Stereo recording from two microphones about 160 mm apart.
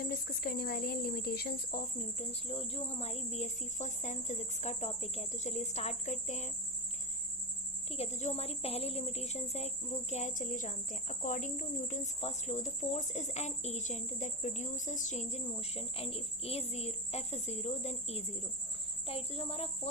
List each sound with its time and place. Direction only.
0.0 s speech: 70° left (ahead or behind)
2.0 s a woman's voice: 40° left (ahead or behind)
7.9 s a woman's voice: 40° left (ahead or behind)